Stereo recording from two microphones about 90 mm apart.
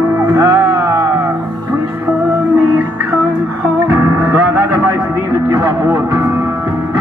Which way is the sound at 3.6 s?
20° right (ahead or behind).